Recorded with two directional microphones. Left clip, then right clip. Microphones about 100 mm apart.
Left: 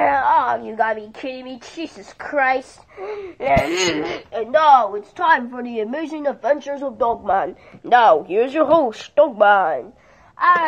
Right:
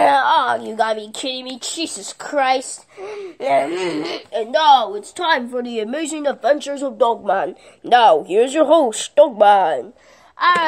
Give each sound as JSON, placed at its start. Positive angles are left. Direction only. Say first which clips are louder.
{"t": 0.3, "sound": "a sound", "louder": "right 1 dB", "side_deg": -25}
{"t": 0.7, "sound": "a woman's voice", "louder": "right 1 dB", "side_deg": -35}
{"t": 3.0, "sound": "a woman's voice", "louder": "even", "side_deg": -20}
{"t": 3.6, "sound": "a woman's voice", "louder": "left 2 dB", "side_deg": -5}
{"t": 5.3, "sound": "speech", "louder": "left 1 dB", "side_deg": -25}
{"t": 5.7, "sound": "a woman's voice", "louder": "right 1 dB", "side_deg": -45}
{"t": 6.4, "sound": "speech", "louder": "right 3 dB", "side_deg": -70}
{"t": 7.2, "sound": "speech", "louder": "even", "side_deg": -25}